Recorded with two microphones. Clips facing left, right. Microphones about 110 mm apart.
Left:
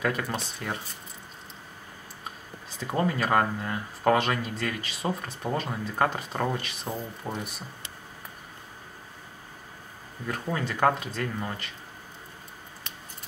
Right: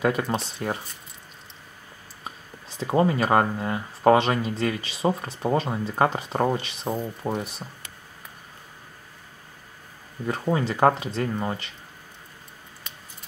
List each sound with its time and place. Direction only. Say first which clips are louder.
0.0 s speech: right 5 dB; 25° right (ahead or behind)
2.8 s speech: right 5 dB; 25° right (ahead or behind)
10.2 s speech: right 6 dB; 25° right (ahead or behind)